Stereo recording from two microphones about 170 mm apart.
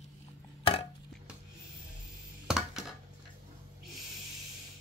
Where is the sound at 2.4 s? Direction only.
5° right (ahead or behind).